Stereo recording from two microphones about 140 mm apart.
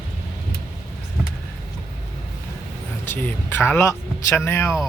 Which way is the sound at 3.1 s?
15° left (ahead or behind).